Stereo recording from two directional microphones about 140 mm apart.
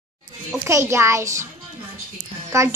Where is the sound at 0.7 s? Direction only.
20° right (ahead or behind).